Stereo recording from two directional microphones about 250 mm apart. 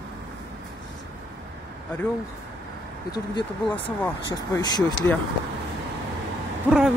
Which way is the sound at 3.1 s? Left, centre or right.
Centre.